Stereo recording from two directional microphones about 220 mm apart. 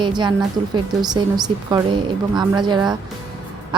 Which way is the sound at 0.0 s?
20° right (ahead or behind).